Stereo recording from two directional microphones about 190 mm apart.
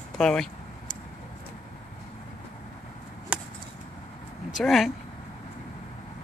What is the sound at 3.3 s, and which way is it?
Chop, 5° right (ahead or behind).